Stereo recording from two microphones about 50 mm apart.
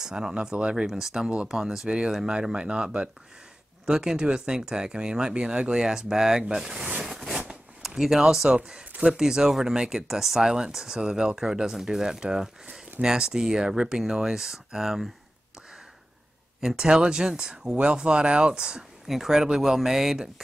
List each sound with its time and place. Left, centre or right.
0.0 s speech: centre
7.0 s a sound: centre
7.8 s speech: centre
16.6 s speech: centre